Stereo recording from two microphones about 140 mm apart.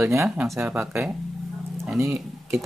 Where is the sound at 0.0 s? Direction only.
20° right (ahead or behind).